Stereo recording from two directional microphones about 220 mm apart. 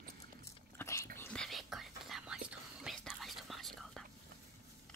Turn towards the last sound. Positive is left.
turn(degrees=0)  # may be behind; listen again after turning